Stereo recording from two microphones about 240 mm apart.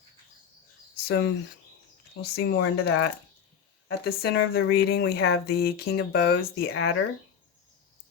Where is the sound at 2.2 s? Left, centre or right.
Left.